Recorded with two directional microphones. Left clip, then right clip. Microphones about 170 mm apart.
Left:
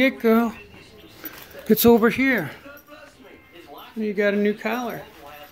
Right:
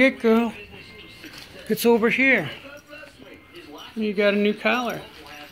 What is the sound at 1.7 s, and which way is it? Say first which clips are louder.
Speech: left 3 dB; 35° left (ahead or behind).